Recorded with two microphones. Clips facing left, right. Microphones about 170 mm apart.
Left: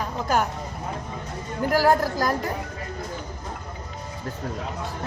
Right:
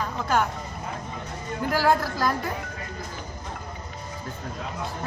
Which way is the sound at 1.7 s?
40° left (ahead or behind).